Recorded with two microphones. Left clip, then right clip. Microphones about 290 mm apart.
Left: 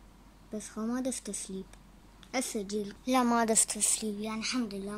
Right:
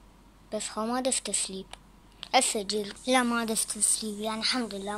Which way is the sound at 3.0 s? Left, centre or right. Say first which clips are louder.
Right 1 dB; centre.